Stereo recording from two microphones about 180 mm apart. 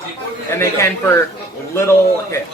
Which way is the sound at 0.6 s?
15° left (ahead or behind).